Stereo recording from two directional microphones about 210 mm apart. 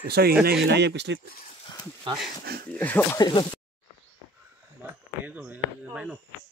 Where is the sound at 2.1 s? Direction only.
20° right (ahead or behind).